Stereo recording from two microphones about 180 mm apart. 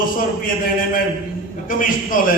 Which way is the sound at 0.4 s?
50° left (ahead or behind).